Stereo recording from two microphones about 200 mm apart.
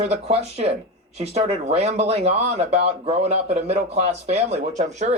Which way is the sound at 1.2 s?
30° right (ahead or behind).